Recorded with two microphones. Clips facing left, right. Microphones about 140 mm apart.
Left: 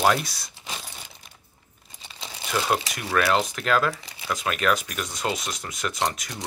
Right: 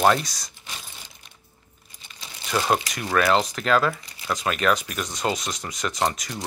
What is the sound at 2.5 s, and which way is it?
Speech, 10° right (ahead or behind).